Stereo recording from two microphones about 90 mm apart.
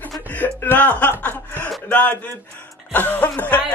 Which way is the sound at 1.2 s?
20° left (ahead or behind).